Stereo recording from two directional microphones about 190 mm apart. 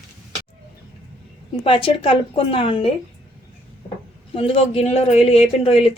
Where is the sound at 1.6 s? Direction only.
30° left (ahead or behind).